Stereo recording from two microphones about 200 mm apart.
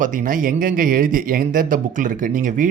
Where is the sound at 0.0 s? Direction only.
40° right (ahead or behind).